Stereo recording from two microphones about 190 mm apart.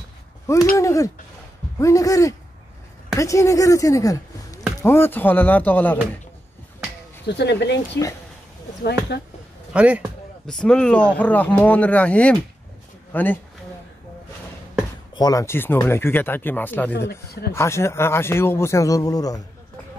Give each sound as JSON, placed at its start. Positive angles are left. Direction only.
{"t": 0.7, "sound": "speech", "side_deg": 15}
{"t": 7.2, "sound": "speech", "side_deg": 60}
{"t": 9.1, "sound": "speech", "side_deg": 60}
{"t": 9.7, "sound": "a sound", "side_deg": -5}
{"t": 10.5, "sound": "speech", "side_deg": 5}
{"t": 15.1, "sound": "speech", "side_deg": 20}
{"t": 17.1, "sound": "speech", "side_deg": 55}
{"t": 17.6, "sound": "speech", "side_deg": 15}